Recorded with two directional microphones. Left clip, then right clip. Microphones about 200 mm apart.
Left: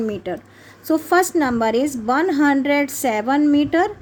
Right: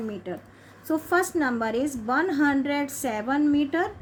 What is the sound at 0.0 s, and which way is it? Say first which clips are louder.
A woman's voice: left 9 dB; 45° left (ahead or behind).